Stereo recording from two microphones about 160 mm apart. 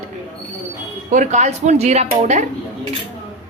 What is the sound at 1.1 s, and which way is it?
A woman's voice, 50° right (ahead or behind).